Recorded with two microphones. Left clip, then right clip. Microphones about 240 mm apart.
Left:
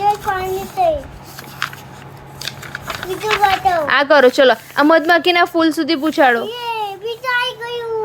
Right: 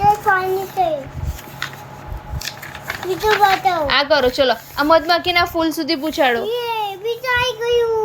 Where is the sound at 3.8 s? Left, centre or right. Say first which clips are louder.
Left 7 dB; centre.